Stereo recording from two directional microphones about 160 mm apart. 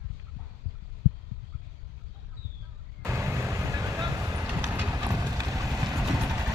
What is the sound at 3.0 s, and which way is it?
Vehicle, 15° right (ahead or behind).